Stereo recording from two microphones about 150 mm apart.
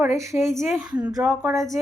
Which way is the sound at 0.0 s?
20° right (ahead or behind).